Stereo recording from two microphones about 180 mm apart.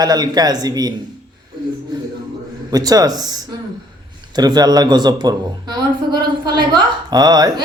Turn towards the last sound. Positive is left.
turn(degrees=-20)  # may be behind; listen again after turning